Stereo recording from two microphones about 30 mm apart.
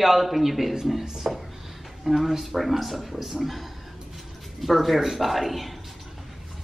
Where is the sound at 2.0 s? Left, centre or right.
Centre.